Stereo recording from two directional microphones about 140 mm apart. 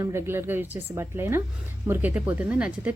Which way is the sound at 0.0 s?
20° right (ahead or behind).